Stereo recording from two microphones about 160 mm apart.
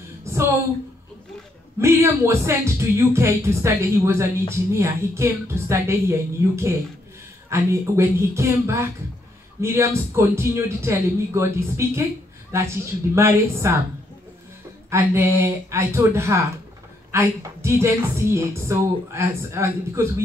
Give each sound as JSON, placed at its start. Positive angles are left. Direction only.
{"t": 0.2, "sound": "a sound", "side_deg": -15}
{"t": 1.8, "sound": "speech", "side_deg": -15}
{"t": 14.9, "sound": "speech", "side_deg": -15}